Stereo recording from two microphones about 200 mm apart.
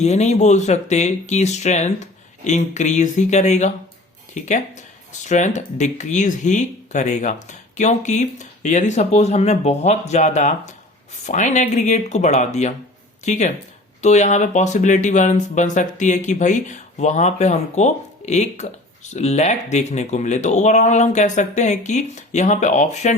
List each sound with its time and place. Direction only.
0.0 s speech: 35° left (ahead or behind)